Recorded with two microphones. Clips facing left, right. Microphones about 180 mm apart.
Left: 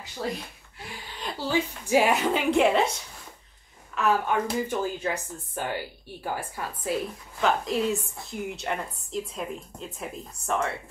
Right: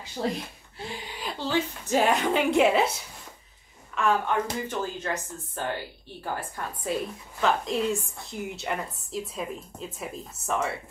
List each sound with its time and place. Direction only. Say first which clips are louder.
0.2 s speech: right 2 dB; 25° right (ahead or behind)
0.7 s a sound: right 5 dB; 25° right (ahead or behind)
1.4 s a woman's voice: left 1 dB; 10° left (ahead or behind)
3.9 s a woman's voice: even; 5° left (ahead or behind)